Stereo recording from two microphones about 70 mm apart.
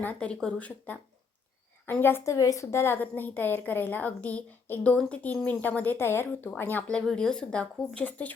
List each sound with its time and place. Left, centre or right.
0.0 s a woman's voice: centre
1.9 s a woman's voice: left
2.2 s a woman's voice: left
7.1 s a woman's voice: centre